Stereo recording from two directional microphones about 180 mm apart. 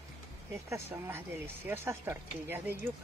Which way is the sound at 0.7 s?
15° right (ahead or behind).